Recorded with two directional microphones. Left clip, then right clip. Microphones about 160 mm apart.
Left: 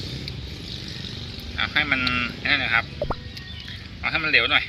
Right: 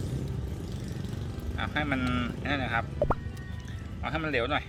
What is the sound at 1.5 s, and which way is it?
Speech, 20° right (ahead or behind).